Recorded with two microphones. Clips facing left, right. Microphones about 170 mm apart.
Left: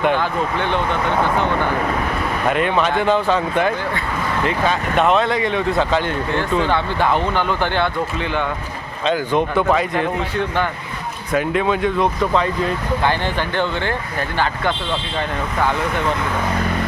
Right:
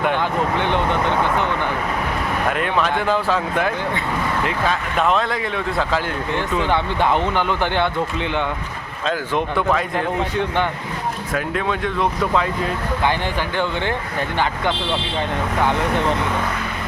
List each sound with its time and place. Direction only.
0.2 s speech: 20° right (ahead or behind)
2.5 s speech: centre (ahead or behind)
6.6 s speech: 15° right (ahead or behind)
9.0 s speech: centre (ahead or behind)
11.3 s speech: 5° left (ahead or behind)
13.1 s speech: 15° right (ahead or behind)